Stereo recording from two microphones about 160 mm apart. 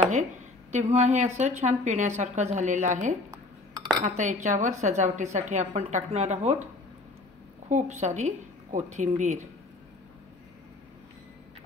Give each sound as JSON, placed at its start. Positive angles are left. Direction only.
{"t": 0.7, "sound": "a woman's voice", "side_deg": -45}
{"t": 7.6, "sound": "a woman's voice", "side_deg": -45}